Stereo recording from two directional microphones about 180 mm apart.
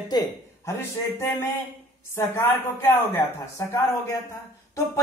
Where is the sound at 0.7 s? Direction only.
15° left (ahead or behind).